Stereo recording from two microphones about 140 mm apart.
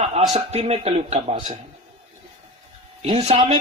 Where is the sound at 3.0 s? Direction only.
45° right (ahead or behind).